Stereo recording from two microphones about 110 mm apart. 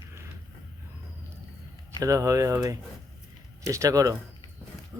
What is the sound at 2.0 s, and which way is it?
Speech, 30° right (ahead or behind).